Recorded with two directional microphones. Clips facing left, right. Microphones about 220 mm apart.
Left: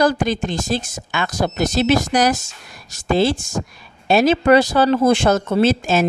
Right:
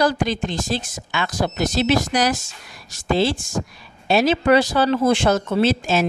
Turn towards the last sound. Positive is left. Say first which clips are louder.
# left 2 dB
turn(degrees=50)  # may be behind; listen again after turning